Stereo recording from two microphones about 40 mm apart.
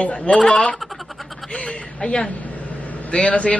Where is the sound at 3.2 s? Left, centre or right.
Left.